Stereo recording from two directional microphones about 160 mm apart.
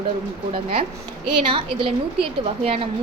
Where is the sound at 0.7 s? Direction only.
35° right (ahead or behind).